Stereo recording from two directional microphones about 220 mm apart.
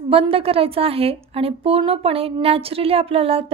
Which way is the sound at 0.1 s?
25° right (ahead or behind).